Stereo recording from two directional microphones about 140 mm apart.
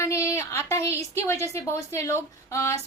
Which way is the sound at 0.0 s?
20° left (ahead or behind).